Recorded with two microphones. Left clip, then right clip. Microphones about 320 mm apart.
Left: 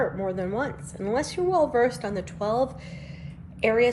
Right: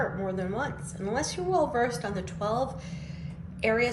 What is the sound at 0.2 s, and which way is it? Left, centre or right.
A woman's voice, left.